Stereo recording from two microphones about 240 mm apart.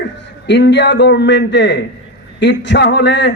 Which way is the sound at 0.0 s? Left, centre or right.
Left.